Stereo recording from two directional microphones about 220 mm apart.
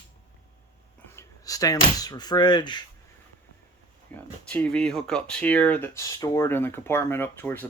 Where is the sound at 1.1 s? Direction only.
15° left (ahead or behind).